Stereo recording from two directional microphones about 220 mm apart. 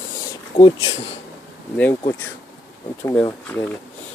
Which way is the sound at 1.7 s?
5° left (ahead or behind).